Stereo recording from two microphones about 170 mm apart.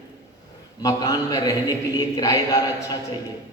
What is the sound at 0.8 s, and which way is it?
A man's voice, 20° left (ahead or behind).